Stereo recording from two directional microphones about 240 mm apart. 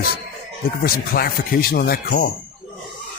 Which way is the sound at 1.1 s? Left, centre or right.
Left.